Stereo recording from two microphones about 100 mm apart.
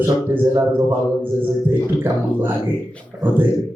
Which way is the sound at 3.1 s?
20° right (ahead or behind).